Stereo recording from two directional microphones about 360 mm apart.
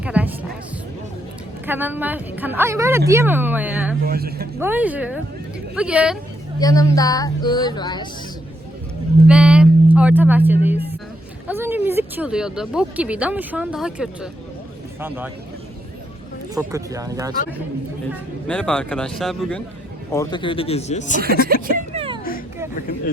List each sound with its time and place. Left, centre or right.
0.0 s music: centre
1.6 s speech: centre
4.0 s speech: right
4.6 s speech: centre
6.6 s speech: centre
9.2 s speech: centre
16.6 s speech: centre
18.1 s speech: centre
20.1 s speech: centre
21.9 s a sound: centre